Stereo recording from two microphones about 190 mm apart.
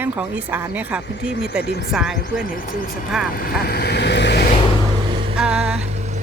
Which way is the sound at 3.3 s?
50° left (ahead or behind).